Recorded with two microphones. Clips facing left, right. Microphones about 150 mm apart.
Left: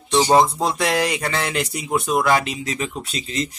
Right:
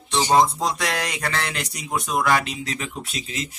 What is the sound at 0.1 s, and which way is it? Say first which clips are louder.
Music: left 4 dB; 10° left (ahead or behind).